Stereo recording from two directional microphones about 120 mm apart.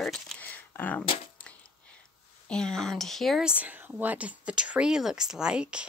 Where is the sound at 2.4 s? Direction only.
5° left (ahead or behind).